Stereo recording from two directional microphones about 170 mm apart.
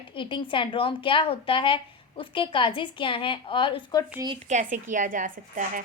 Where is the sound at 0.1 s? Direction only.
30° left (ahead or behind).